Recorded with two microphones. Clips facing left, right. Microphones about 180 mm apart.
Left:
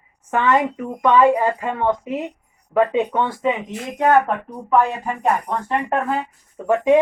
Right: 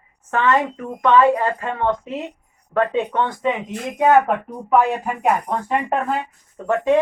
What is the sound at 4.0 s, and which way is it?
Speech, 10° right (ahead or behind).